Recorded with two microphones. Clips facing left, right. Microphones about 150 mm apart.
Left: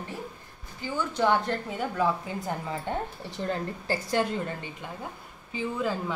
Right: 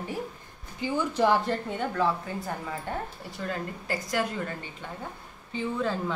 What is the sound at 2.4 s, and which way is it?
A woman's voice, 20° left (ahead or behind).